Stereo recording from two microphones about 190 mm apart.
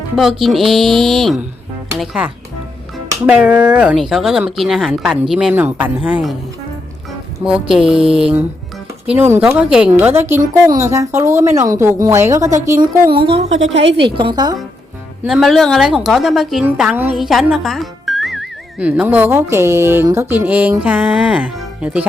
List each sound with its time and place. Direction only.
0.2 s a woman's voice: centre (ahead or behind)
7.4 s a woman's voice: 5° right (ahead or behind); by 13.8 s 35° right (ahead or behind)
13.8 s a woman's voice: 60° right (ahead or behind)
14.2 s speech: 25° right (ahead or behind)
15.2 s a woman's voice: centre (ahead or behind)